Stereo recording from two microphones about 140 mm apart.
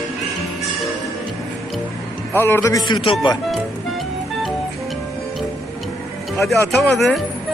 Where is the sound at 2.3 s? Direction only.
15° left (ahead or behind).